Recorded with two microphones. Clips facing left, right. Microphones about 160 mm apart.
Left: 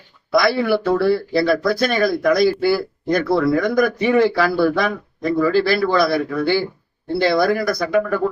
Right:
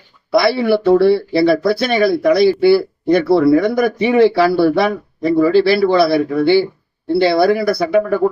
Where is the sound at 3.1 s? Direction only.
30° right (ahead or behind).